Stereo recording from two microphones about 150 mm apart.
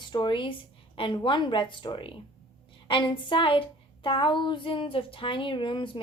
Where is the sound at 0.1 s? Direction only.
30° left (ahead or behind).